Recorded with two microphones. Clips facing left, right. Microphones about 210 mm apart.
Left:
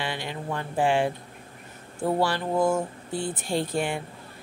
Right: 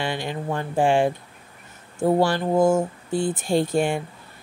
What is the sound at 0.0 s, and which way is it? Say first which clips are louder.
Speech: right 5 dB; 45° right (ahead or behind).